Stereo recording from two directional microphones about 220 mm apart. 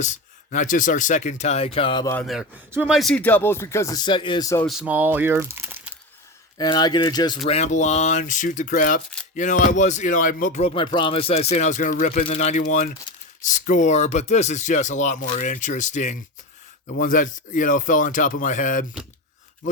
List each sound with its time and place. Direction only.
0.0 s speech: 35° left (ahead or behind)
2.1 s speech: centre (ahead or behind); by 4.6 s 15° left (ahead or behind)
4.6 s speech: 5° right (ahead or behind)
6.6 s speech: 20° left (ahead or behind); by 18.9 s 35° left (ahead or behind)